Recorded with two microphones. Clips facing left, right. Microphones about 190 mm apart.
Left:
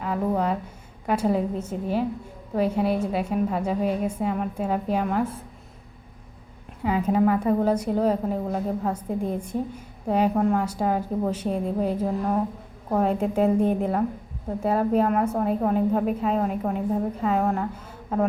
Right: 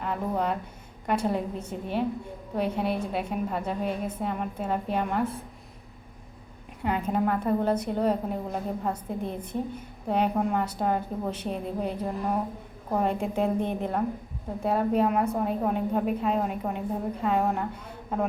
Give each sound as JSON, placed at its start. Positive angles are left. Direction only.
{"t": 0.0, "sound": "a woman's voice", "side_deg": 5}
{"t": 6.8, "sound": "a woman's voice", "side_deg": 5}